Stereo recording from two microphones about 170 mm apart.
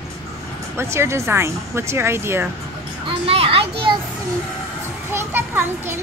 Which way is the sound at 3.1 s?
35° right (ahead or behind).